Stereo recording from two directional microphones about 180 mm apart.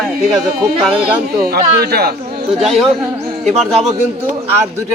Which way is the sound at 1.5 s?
60° right (ahead or behind).